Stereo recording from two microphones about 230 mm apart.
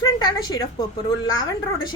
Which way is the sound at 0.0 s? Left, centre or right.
Centre.